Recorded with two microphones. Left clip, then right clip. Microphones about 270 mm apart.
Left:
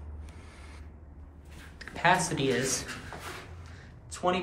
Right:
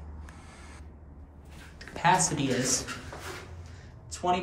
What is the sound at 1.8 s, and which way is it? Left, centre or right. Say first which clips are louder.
Speech: right 1 dB; centre.